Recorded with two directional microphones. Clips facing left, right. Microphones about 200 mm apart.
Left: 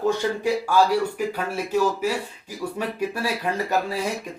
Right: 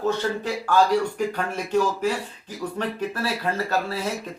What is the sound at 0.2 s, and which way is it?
Speech, 10° left (ahead or behind).